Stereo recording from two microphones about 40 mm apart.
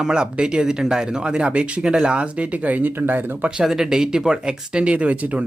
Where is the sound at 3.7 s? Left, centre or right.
Centre.